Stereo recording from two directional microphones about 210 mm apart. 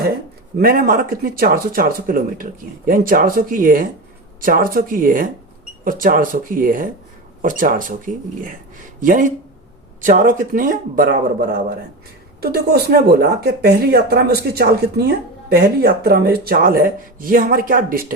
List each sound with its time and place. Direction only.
0.6 s speech: 45° right (ahead or behind)